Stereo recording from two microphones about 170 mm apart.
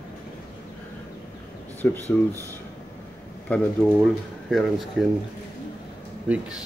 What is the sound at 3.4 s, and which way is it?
Speech, 5° left (ahead or behind).